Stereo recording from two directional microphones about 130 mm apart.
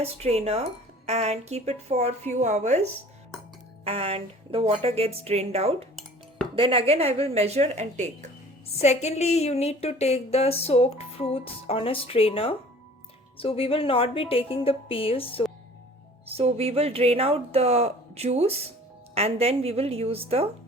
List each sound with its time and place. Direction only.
0.0 s a woman's voice: 55° right (ahead or behind)
3.8 s speech: 50° right (ahead or behind)
8.8 s a woman's voice: 55° left (ahead or behind)
16.2 s speech: 50° right (ahead or behind)